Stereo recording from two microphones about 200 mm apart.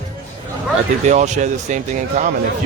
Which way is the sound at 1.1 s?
35° right (ahead or behind).